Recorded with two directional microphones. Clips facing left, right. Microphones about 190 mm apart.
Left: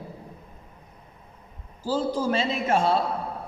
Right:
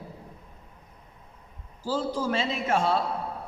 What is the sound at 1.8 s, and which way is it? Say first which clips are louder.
A man's voice: left 3 dB; 30° left (ahead or behind).